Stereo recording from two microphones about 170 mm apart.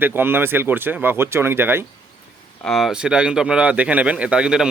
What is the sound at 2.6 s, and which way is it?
Speech, centre (ahead or behind).